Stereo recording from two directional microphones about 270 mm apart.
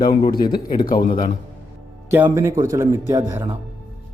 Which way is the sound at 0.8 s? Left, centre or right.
Left.